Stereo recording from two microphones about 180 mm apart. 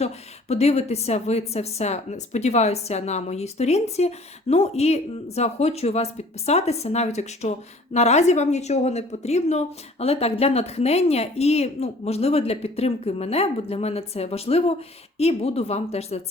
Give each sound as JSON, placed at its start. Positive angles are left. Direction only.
{"t": 0.0, "sound": "a woman's voice", "side_deg": 35}